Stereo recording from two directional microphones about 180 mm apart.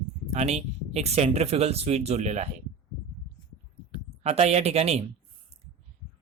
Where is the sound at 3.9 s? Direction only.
35° right (ahead or behind).